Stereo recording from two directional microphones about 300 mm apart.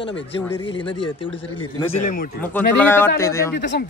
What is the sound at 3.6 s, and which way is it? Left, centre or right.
Speech, left.